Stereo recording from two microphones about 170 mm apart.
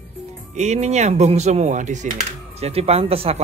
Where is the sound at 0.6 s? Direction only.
40° right (ahead or behind).